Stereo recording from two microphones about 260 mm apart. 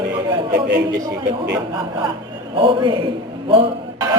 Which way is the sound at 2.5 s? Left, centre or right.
Centre.